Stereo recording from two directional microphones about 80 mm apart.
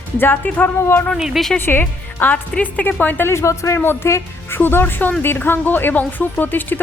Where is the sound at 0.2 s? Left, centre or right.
Left.